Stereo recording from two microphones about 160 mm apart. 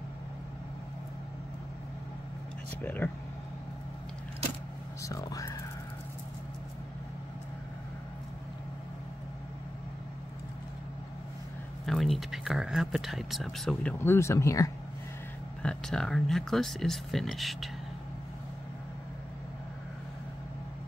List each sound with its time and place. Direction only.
2.8 s speech: 10° left (ahead or behind)
5.0 s speech: 20° left (ahead or behind)
11.8 s speech: centre (ahead or behind)
13.9 s speech: 15° left (ahead or behind)
15.6 s speech: 5° left (ahead or behind)